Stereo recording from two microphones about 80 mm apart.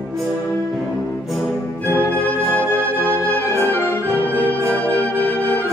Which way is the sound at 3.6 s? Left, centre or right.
Left.